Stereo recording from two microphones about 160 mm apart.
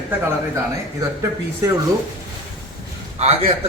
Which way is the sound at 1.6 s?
20° right (ahead or behind).